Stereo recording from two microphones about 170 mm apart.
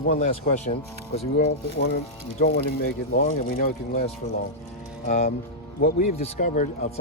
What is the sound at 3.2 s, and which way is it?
Speech, 50° left (ahead or behind).